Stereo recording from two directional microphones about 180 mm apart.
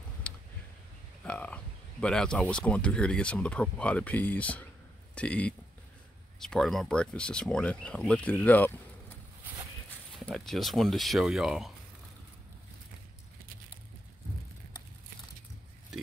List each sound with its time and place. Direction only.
0.3 s a sound: 5° left (ahead or behind)
1.2 s speech: 5° left (ahead or behind)
9.8 s speech: 5° left (ahead or behind)
15.9 s oink: 5° right (ahead or behind)